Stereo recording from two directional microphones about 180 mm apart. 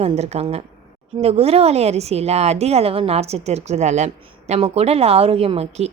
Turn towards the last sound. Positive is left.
turn(degrees=-35)  # may be behind; listen again after turning